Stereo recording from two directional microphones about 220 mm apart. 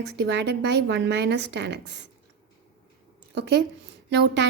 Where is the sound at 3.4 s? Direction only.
50° right (ahead or behind).